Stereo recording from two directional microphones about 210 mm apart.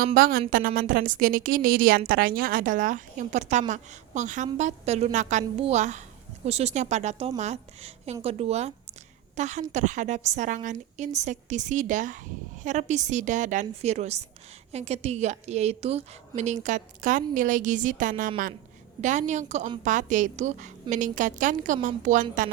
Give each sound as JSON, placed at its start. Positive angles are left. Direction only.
{"t": 0.0, "sound": "a woman's voice", "side_deg": -45}